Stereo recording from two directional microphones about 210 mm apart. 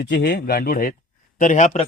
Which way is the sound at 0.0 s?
50° left (ahead or behind).